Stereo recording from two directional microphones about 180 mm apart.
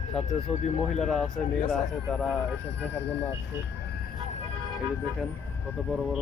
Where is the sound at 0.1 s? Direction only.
5° left (ahead or behind).